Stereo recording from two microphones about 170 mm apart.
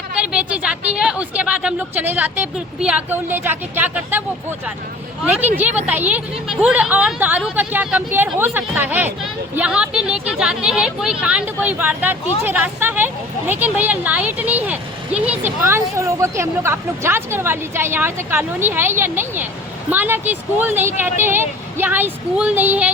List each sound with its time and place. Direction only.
0.2 s a sound: 5° right (ahead or behind)
0.9 s speech: 5° right (ahead or behind)
5.2 s speech: 10° right (ahead or behind)